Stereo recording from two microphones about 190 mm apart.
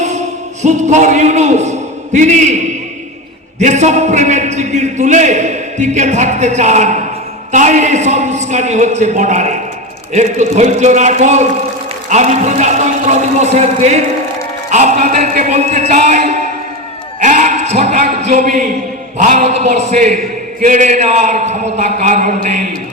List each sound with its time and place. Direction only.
0.0 s a man's voice: 40° right (ahead or behind)